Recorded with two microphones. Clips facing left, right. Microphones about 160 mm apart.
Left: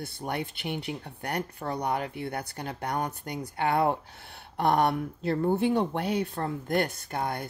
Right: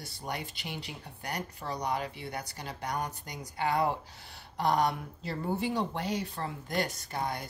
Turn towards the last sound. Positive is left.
turn(degrees=55)  # may be behind; listen again after turning